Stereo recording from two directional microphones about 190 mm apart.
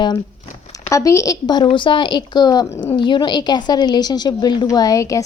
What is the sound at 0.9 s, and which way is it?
A woman's voice, 15° left (ahead or behind).